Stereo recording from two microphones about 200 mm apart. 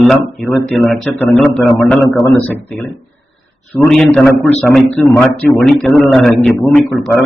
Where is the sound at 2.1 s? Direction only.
15° left (ahead or behind).